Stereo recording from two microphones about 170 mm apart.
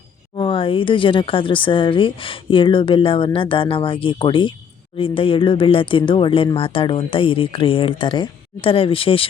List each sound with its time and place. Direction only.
0.3 s speech: 30° left (ahead or behind)